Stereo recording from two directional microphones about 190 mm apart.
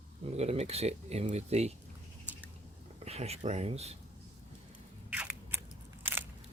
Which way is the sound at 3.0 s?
35° right (ahead or behind).